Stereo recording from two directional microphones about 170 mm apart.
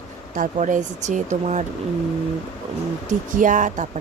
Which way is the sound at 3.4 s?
50° right (ahead or behind).